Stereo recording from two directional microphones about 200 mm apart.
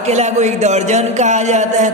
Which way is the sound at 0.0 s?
35° right (ahead or behind).